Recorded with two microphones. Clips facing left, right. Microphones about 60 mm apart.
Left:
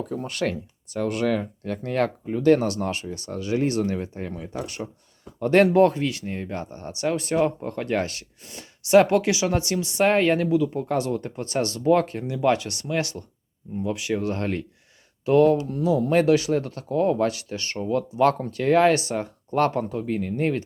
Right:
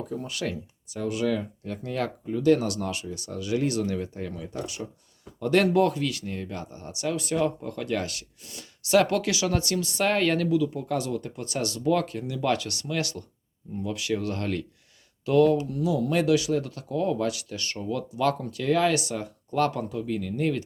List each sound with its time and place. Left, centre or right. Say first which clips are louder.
0.1 s speech: left 5 dB; left
10.6 s speech: left 3 dB; left
12.4 s speech: left 5 dB; left